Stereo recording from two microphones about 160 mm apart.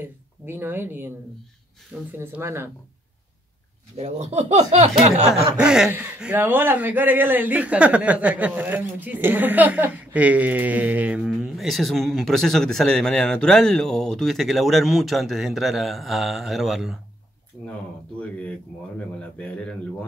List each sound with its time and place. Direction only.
0.0 s speech: 15° right (ahead or behind)
2.1 s speech: 15° right (ahead or behind)
3.9 s speech: 40° right (ahead or behind)
5.6 s a man's voice: 5° right (ahead or behind)
17.5 s a sound: 20° left (ahead or behind)
19.3 s speech: 5° left (ahead or behind)